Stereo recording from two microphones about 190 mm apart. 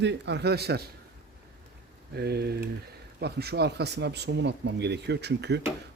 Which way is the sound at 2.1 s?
60° right (ahead or behind).